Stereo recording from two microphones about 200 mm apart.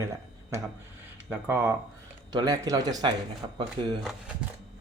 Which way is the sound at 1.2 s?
10° right (ahead or behind).